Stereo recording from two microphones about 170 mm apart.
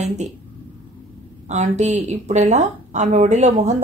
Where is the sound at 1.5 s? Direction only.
45° right (ahead or behind).